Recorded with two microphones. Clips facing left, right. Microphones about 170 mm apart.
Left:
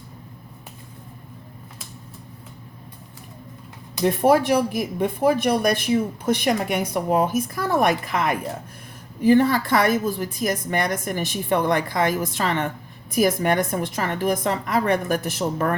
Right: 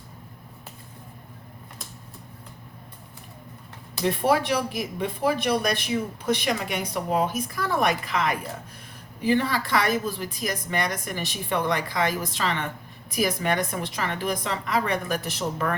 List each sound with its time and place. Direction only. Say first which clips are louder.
4.0 s a woman's voice: left 5 dB; 50° left (ahead or behind)